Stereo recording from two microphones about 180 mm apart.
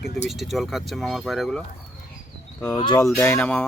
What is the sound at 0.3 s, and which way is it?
Speech, centre (ahead or behind).